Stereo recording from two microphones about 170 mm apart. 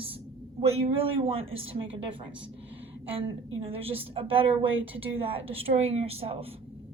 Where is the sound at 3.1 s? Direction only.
35° right (ahead or behind).